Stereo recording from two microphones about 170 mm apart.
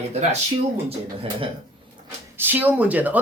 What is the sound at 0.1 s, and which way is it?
Speech, 40° right (ahead or behind).